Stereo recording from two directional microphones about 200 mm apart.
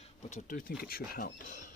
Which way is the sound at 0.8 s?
50° left (ahead or behind).